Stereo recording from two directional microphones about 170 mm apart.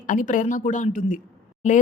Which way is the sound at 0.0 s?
50° left (ahead or behind).